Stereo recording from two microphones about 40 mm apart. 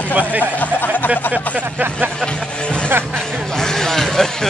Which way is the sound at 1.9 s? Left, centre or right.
Right.